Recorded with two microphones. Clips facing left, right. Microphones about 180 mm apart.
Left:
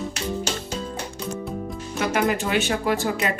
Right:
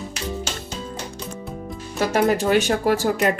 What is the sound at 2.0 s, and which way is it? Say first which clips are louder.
Speech: right 4 dB; 35° right (ahead or behind).